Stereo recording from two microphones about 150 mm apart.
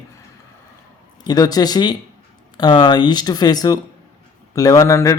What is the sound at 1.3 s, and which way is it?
Speech, 25° left (ahead or behind).